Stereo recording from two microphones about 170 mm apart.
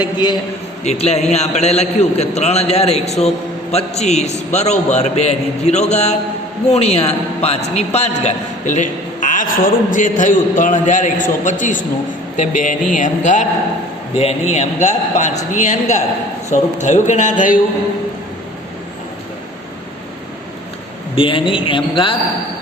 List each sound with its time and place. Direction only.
0.0 s a man's voice: 25° left (ahead or behind)
0.9 s a man's voice: 40° left (ahead or behind)
21.2 s a man's voice: 30° left (ahead or behind)